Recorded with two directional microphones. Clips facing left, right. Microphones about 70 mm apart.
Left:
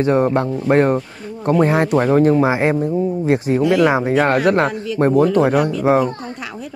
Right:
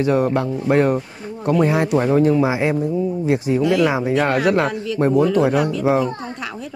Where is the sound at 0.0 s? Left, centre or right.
Left.